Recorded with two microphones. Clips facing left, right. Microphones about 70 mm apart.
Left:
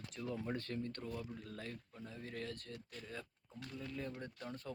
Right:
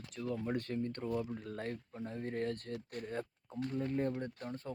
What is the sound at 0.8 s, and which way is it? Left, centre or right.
Speech, right.